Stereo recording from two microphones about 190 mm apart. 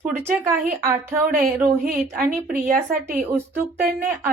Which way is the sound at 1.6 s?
50° right (ahead or behind).